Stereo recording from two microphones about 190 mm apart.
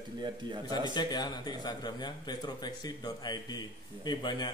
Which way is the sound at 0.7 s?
20° left (ahead or behind).